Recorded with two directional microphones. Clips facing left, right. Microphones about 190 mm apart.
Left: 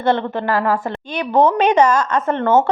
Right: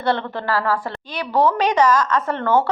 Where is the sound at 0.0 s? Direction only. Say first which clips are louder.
Left 4 dB; 20° left (ahead or behind).